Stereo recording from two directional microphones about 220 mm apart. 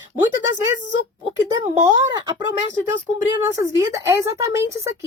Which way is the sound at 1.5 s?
15° right (ahead or behind).